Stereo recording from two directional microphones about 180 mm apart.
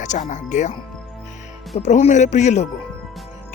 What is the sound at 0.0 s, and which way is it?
Speech, 45° left (ahead or behind).